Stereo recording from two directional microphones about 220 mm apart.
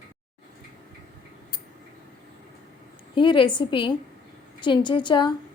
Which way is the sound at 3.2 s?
20° left (ahead or behind).